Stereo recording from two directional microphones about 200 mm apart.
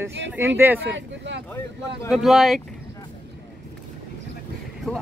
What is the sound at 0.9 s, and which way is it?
Speech, 65° right (ahead or behind).